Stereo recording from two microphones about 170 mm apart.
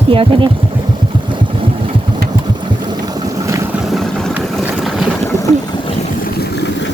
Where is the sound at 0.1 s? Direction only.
30° right (ahead or behind).